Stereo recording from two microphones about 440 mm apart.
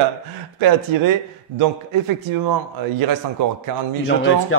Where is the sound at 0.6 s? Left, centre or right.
Right.